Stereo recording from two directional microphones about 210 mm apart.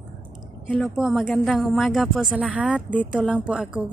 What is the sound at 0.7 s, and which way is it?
A woman's voice, centre (ahead or behind).